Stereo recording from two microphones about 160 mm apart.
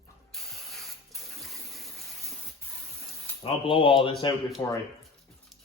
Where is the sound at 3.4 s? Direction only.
35° left (ahead or behind).